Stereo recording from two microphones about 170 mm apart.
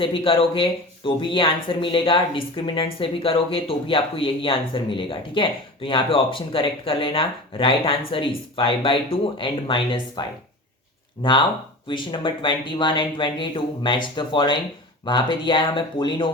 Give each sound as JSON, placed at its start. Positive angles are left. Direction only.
{"t": 0.0, "sound": "speech", "side_deg": 30}